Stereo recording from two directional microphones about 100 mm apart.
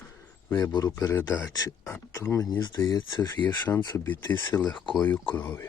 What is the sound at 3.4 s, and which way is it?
Speech, 45° left (ahead or behind).